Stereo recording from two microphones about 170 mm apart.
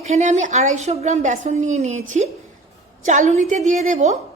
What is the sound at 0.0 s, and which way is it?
A woman's voice, 45° right (ahead or behind).